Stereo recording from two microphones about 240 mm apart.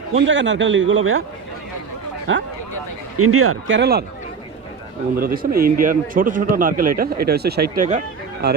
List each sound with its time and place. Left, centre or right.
0.1 s a man's voice: right
2.3 s speech: right
3.2 s speech: right
3.8 s a man's voice: right
5.1 s a man's voice: right